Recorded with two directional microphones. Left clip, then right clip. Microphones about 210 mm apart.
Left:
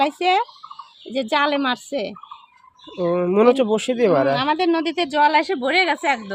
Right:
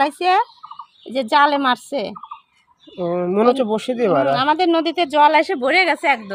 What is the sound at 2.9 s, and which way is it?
Speech, 5° left (ahead or behind).